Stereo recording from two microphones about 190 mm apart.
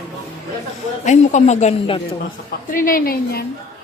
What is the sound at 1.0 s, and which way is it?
Speech, 40° left (ahead or behind).